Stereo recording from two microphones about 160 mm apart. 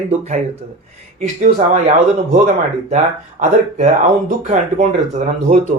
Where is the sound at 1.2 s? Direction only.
50° right (ahead or behind).